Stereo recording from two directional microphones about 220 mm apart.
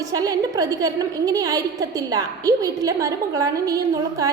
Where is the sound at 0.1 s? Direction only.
15° right (ahead or behind).